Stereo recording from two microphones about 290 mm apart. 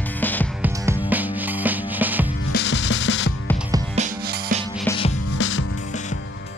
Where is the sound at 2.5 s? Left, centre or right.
Left.